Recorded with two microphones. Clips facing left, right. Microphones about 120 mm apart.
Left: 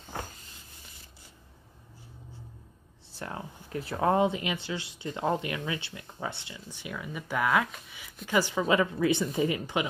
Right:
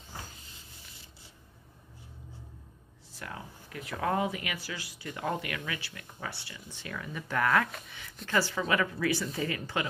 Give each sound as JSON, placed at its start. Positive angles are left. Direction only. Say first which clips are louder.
{"t": 0.1, "sound": "vehicle", "louder": "left 7 dB", "side_deg": 65}
{"t": 3.1, "sound": "speech", "louder": "left 4 dB", "side_deg": 30}